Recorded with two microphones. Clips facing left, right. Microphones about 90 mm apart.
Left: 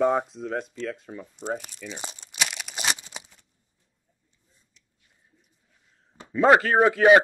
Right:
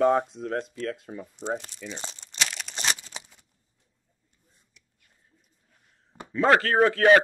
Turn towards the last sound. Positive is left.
turn(degrees=15)  # may be behind; listen again after turning